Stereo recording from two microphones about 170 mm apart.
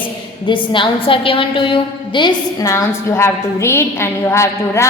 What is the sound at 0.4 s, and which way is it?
A woman's voice, 30° left (ahead or behind).